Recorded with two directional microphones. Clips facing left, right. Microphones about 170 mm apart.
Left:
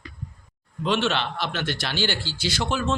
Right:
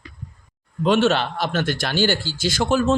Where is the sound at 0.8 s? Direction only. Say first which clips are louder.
Right 6 dB; 45° right (ahead or behind).